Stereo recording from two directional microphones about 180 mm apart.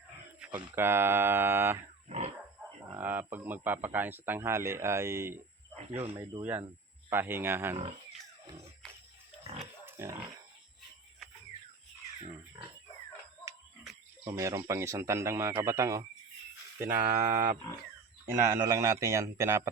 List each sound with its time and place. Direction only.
0.3 s a sound: 5° right (ahead or behind)
0.8 s speech: 15° right (ahead or behind)
2.0 s pig: 35° right (ahead or behind)
2.9 s speech: 10° right (ahead or behind)
5.7 s speech: 35° right (ahead or behind)
6.1 s speech: 15° right (ahead or behind)
9.8 s pig: 15° right (ahead or behind)
14.3 s speech: 15° right (ahead or behind)
18.5 s speech: 20° right (ahead or behind)